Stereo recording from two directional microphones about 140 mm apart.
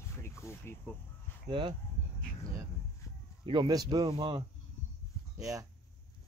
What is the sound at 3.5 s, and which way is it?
Speech, 30° right (ahead or behind).